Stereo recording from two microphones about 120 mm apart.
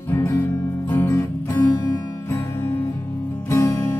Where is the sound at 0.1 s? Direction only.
20° left (ahead or behind).